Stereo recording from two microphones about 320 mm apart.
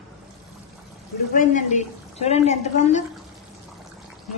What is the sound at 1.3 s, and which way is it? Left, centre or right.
A man's voice, left.